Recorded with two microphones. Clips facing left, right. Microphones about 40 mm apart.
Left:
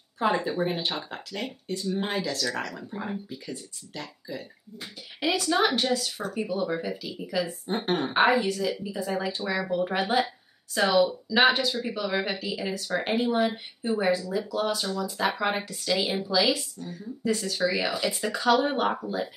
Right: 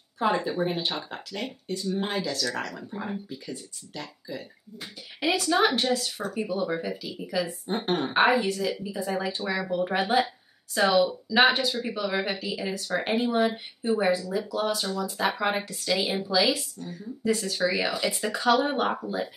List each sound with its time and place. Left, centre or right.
0.2 s speech: centre